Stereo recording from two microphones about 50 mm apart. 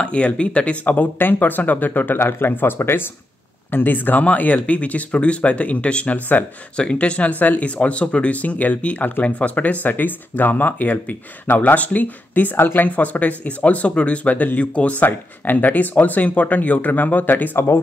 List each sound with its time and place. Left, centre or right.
0.0 s speech: left
2.1 s speech: left
3.7 s speech: left
6.8 s speech: left
9.8 s speech: left
12.8 s speech: left